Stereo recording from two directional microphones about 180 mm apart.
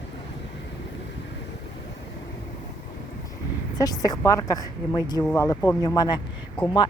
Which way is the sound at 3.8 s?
20° left (ahead or behind).